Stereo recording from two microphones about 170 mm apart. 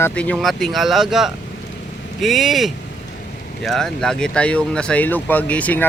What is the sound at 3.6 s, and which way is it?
Speech, 5° left (ahead or behind).